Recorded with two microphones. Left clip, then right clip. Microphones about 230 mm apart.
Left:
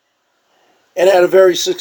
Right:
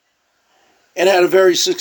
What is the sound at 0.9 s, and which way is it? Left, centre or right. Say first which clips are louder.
Speech: left 3 dB; right.